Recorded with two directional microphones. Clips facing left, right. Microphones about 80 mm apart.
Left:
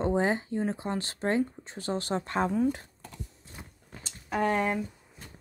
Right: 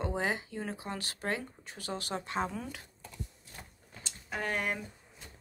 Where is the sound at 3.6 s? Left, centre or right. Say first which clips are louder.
Left 3 dB; centre.